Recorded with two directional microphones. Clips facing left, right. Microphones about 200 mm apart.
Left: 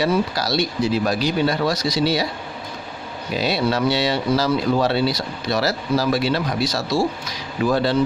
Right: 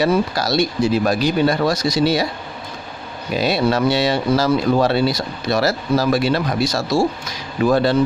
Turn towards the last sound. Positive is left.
turn(degrees=-50)  # may be behind; listen again after turning